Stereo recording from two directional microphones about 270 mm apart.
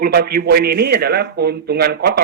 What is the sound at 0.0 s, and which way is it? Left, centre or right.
Speech, right.